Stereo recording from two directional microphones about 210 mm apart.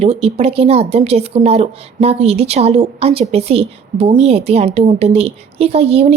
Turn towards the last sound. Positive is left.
turn(degrees=-30)  # may be behind; listen again after turning